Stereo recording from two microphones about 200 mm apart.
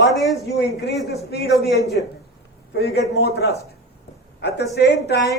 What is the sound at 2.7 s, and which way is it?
A man's voice, 55° left (ahead or behind).